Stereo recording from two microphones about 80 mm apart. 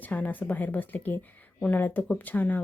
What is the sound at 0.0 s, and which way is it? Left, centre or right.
A woman's voice, centre.